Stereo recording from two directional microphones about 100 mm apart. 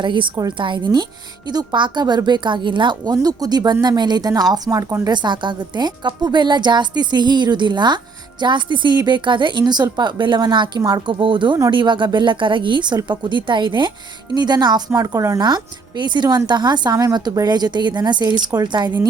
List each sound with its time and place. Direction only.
0.0 s a woman's voice: 55° right (ahead or behind); by 4.9 s 35° right (ahead or behind)
5.0 s a woman's voice: 45° right (ahead or behind)
11.2 s a woman's voice: 55° right (ahead or behind); by 15.4 s 30° right (ahead or behind)
15.4 s a woman's voice: 45° right (ahead or behind)